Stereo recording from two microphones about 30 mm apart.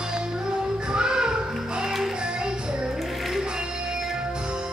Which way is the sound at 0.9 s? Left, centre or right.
Right.